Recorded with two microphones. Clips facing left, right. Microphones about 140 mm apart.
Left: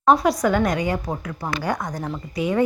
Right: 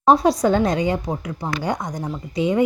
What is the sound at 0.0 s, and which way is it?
Speech, 30° right (ahead or behind).